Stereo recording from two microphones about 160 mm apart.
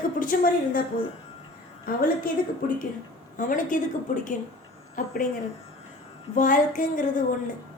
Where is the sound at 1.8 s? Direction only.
65° left (ahead or behind).